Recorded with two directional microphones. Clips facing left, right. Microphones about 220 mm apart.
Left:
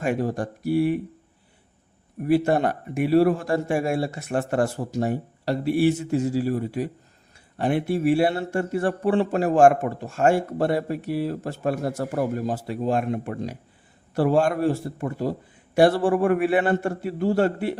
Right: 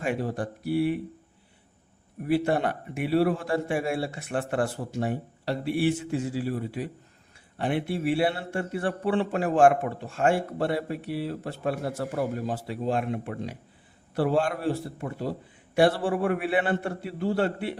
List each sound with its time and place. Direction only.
0.0 s a man's voice: 45° left (ahead or behind)
2.2 s a man's voice: 45° left (ahead or behind)